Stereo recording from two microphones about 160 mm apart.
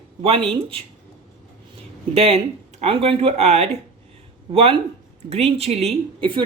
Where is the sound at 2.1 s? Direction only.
40° right (ahead or behind).